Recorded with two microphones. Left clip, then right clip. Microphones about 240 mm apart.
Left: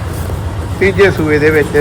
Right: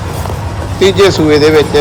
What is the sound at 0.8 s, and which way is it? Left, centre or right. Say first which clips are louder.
Speech: right 2 dB; centre.